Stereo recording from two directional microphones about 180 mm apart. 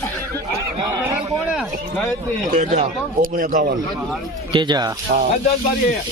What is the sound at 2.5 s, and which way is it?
A man's voice, 40° right (ahead or behind).